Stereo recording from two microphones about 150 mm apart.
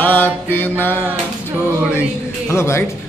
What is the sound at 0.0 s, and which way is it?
Mantra, 10° left (ahead or behind).